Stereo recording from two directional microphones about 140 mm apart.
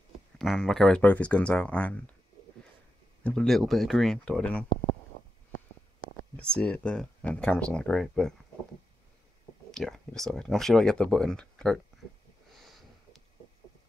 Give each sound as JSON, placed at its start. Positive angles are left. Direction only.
{"t": 0.4, "sound": "speech", "side_deg": 5}
{"t": 3.3, "sound": "speech", "side_deg": 5}
{"t": 5.1, "sound": "a sound", "side_deg": 90}
{"t": 6.3, "sound": "speech", "side_deg": 10}
{"t": 9.7, "sound": "speech", "side_deg": 5}
{"t": 12.5, "sound": "sniff", "side_deg": 0}